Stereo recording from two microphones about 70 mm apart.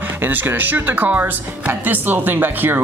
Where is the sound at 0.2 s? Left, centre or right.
Right.